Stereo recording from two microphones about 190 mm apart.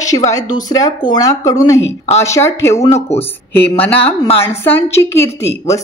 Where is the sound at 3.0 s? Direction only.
35° left (ahead or behind).